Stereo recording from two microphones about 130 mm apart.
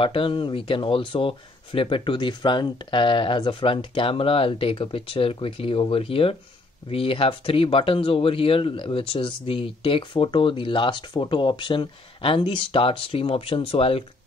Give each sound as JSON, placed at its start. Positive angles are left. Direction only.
{"t": 0.0, "sound": "speech", "side_deg": 45}